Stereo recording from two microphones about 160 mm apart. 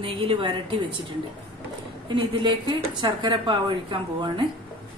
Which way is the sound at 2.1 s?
30° right (ahead or behind).